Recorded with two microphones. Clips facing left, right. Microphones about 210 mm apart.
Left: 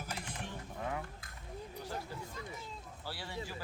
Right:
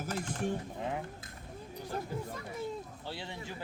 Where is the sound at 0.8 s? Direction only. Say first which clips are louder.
Left 2 dB; 20° right (ahead or behind).